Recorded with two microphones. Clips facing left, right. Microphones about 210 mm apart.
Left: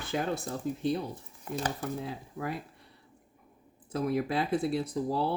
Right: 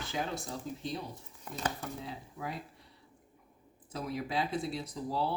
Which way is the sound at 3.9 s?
55° left (ahead or behind).